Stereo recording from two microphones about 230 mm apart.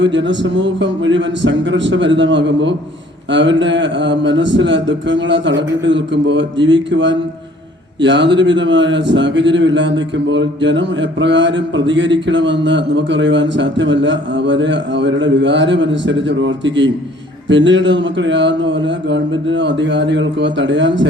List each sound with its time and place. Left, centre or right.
0.0 s speech: right